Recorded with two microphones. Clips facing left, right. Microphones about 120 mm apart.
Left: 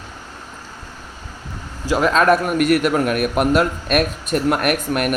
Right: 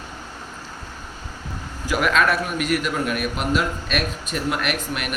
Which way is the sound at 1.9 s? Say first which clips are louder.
Left 4 dB; 30° left (ahead or behind).